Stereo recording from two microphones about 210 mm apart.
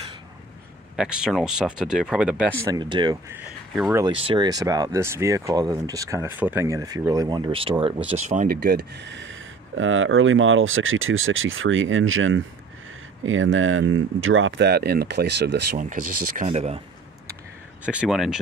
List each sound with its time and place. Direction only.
0.9 s speech: 5° right (ahead or behind)
2.6 s speech: 20° right (ahead or behind)
3.3 s speech: centre (ahead or behind)
4.2 s speech: 20° right (ahead or behind); by 15.8 s 50° right (ahead or behind)
15.8 s speech: 40° right (ahead or behind)
17.8 s speech: 5° right (ahead or behind)